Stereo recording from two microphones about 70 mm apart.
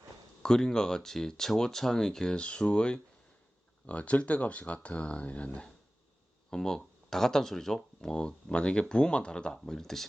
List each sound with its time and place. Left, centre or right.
0.4 s speech: centre
6.5 s speech: centre